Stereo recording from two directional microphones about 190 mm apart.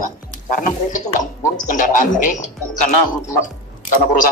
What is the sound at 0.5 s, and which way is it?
Speech, 45° left (ahead or behind).